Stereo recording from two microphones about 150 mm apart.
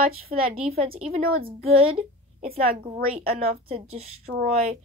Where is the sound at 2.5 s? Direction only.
80° right.